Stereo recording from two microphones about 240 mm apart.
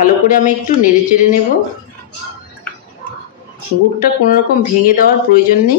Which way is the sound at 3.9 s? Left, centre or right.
Left.